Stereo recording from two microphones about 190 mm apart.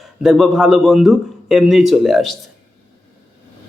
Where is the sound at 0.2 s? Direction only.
Centre (ahead or behind).